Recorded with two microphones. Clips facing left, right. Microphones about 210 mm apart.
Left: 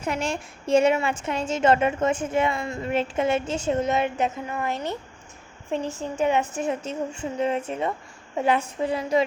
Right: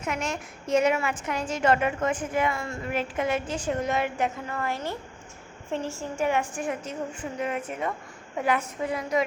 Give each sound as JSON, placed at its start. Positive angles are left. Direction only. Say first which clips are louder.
{"t": 0.0, "sound": "a woman's voice", "louder": "left 3 dB", "side_deg": 30}